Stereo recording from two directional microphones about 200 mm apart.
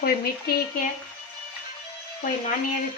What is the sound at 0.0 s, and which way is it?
Speech, 50° left (ahead or behind).